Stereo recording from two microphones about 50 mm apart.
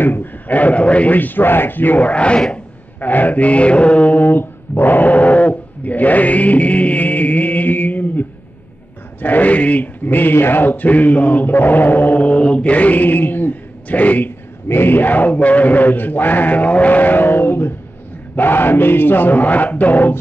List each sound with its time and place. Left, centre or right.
0.0 s a man's voice: left
3.0 s mantra: left
9.2 s a sound: left
10.3 s chant: left
14.7 s a man's voice: left